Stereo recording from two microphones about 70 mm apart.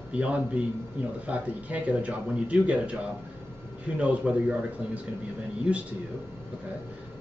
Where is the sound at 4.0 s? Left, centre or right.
Centre.